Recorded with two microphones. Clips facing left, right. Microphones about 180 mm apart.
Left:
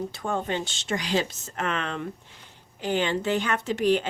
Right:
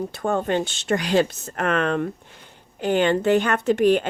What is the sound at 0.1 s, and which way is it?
Speech, 55° right (ahead or behind).